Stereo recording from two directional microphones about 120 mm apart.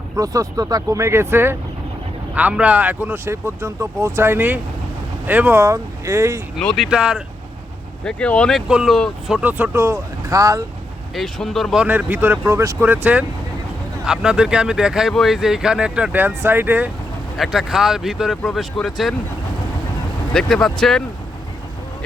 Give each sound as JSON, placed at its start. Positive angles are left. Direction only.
{"t": 0.2, "sound": "speech", "side_deg": -30}
{"t": 6.6, "sound": "speech", "side_deg": 5}
{"t": 6.8, "sound": "speech", "side_deg": -5}
{"t": 8.0, "sound": "speech", "side_deg": 10}
{"t": 9.4, "sound": "speech", "side_deg": -15}
{"t": 11.1, "sound": "speech", "side_deg": 0}
{"t": 17.3, "sound": "speech", "side_deg": 0}
{"t": 20.3, "sound": "speech", "side_deg": 5}